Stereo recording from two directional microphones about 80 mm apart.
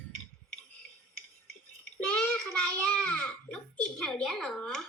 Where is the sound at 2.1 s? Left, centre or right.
Centre.